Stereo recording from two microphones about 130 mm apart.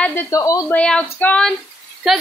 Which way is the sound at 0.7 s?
10° left (ahead or behind).